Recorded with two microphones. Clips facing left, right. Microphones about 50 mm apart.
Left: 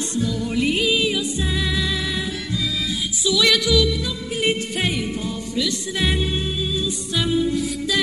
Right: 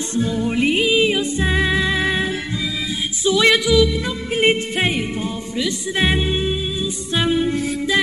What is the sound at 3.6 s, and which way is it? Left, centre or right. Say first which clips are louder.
Music: right 4 dB; centre.